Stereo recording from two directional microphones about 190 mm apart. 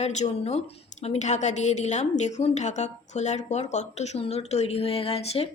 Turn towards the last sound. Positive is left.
turn(degrees=30)  # may be behind; listen again after turning